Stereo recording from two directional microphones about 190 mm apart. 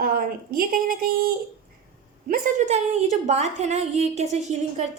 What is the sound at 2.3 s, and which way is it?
A woman's voice, 40° right (ahead or behind).